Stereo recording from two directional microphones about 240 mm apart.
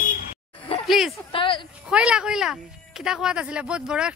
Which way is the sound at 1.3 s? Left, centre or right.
Left.